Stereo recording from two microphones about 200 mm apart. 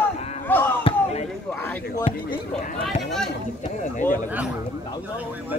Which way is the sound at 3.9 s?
40° left (ahead or behind).